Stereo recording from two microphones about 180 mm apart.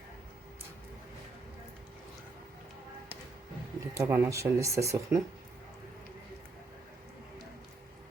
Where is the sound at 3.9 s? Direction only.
15° right (ahead or behind).